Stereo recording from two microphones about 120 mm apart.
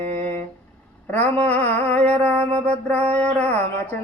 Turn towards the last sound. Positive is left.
turn(degrees=10)  # may be behind; listen again after turning